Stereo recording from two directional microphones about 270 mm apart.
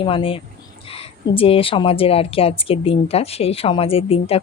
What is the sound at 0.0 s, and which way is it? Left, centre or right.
Speech, centre.